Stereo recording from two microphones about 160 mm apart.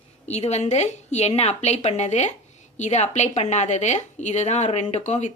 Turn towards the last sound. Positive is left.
turn(degrees=45)  # may be behind; listen again after turning